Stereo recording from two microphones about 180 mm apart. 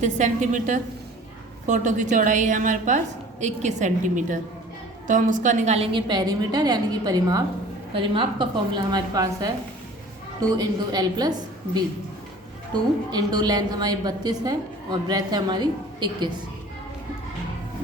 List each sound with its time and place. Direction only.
0.0 s a woman's voice: 45° right (ahead or behind); by 9.5 s 20° right (ahead or behind)
10.6 s a woman's voice: 20° right (ahead or behind)
13.1 s a woman's voice: 25° right (ahead or behind)